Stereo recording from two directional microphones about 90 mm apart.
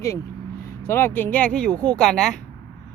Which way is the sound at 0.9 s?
25° left (ahead or behind).